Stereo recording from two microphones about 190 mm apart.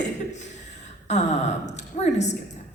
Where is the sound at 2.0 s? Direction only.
35° left (ahead or behind).